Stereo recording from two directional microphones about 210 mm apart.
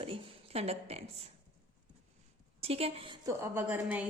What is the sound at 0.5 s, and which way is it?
Speech, 30° right (ahead or behind).